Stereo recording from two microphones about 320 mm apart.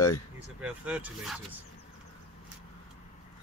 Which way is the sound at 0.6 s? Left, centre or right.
Centre.